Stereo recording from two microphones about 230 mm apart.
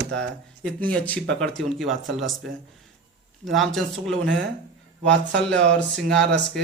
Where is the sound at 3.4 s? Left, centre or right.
Centre.